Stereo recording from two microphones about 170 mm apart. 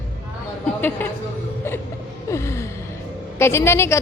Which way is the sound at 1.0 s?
10° left (ahead or behind).